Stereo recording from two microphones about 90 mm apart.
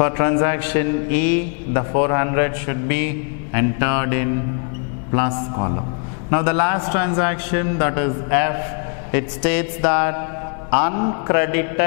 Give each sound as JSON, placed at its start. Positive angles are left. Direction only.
{"t": 0.0, "sound": "a man's voice", "side_deg": 15}